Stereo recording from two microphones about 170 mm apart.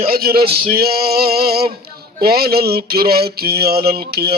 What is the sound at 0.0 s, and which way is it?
Male singing, 60° right (ahead or behind).